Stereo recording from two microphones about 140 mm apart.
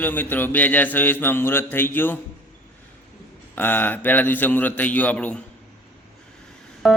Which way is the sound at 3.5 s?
15° left (ahead or behind).